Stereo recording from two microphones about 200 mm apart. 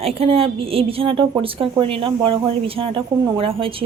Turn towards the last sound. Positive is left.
turn(degrees=-25)  # may be behind; listen again after turning